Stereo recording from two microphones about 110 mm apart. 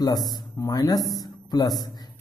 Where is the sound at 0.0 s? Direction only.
35° left (ahead or behind).